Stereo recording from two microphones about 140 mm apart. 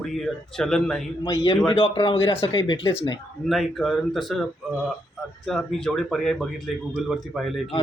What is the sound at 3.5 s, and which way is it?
Speech, centre (ahead or behind).